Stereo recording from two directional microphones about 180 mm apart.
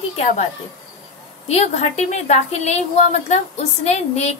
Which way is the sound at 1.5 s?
35° left (ahead or behind).